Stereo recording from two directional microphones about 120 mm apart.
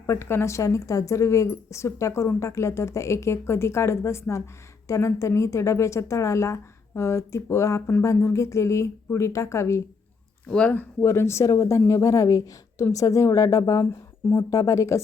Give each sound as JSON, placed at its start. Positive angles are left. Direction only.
{"t": 0.1, "sound": "speech", "side_deg": 20}
{"t": 10.5, "sound": "speech", "side_deg": 10}